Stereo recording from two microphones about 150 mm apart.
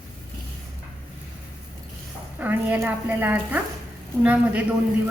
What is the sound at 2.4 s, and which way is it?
Speech, 10° right (ahead or behind).